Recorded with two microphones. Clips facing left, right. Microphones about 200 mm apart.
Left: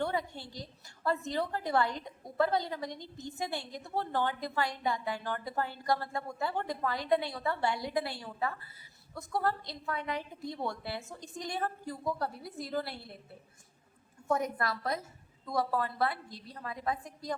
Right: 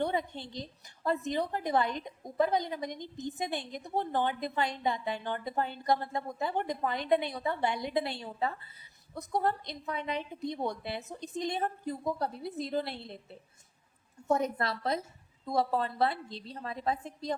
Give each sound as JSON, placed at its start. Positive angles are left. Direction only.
{"t": 0.0, "sound": "a woman's voice", "side_deg": -20}
{"t": 14.3, "sound": "a woman's voice", "side_deg": -25}